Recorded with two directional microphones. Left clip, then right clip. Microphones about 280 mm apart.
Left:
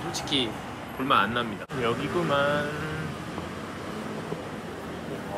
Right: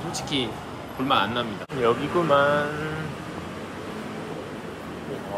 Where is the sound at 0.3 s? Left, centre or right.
Right.